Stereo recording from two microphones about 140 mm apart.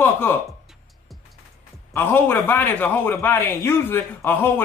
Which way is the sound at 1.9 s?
15° left (ahead or behind).